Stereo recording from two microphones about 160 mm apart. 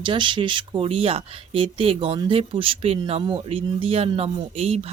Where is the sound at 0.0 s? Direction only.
30° right (ahead or behind).